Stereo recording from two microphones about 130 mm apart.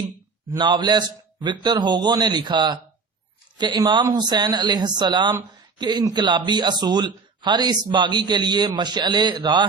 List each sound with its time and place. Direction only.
0.5 s speech: 35° right (ahead or behind)